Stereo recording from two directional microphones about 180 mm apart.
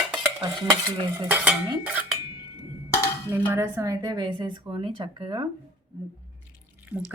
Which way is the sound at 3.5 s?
15° right (ahead or behind).